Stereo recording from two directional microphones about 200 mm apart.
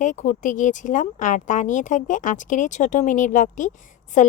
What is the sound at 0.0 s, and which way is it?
Speech, 40° left (ahead or behind).